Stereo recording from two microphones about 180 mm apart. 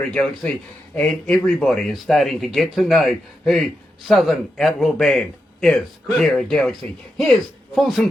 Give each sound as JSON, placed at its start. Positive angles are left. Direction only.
{"t": 0.0, "sound": "speech", "side_deg": 5}
{"t": 7.8, "sound": "speech", "side_deg": 0}